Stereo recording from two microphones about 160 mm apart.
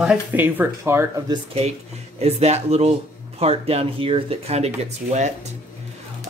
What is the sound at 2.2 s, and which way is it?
Speech, 40° right (ahead or behind).